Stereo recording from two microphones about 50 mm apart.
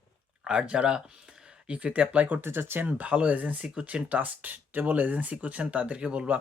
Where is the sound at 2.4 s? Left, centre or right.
Right.